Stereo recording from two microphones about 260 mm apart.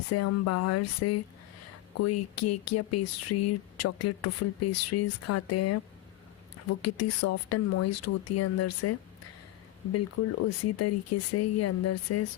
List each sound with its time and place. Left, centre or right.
0.1 s speech: left